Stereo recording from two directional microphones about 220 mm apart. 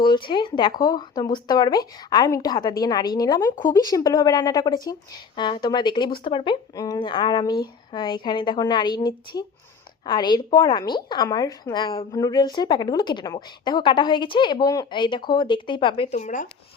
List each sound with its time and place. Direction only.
0.0 s a woman's voice: 20° left (ahead or behind)
3.5 s speech: 35° left (ahead or behind)
3.8 s a woman's voice: 15° left (ahead or behind)
16.1 s speech: 35° left (ahead or behind)